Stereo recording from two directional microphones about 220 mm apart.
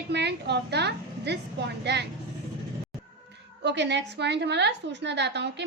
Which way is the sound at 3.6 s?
50° right (ahead or behind).